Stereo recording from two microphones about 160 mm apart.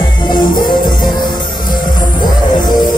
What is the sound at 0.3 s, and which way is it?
Music, 25° left (ahead or behind).